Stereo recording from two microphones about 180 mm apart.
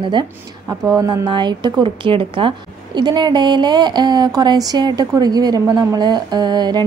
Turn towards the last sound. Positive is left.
turn(degrees=-25)  # may be behind; listen again after turning